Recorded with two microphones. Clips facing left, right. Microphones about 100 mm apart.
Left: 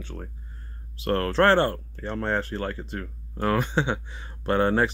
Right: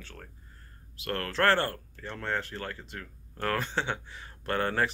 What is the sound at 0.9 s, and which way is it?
Speech, 30° left (ahead or behind).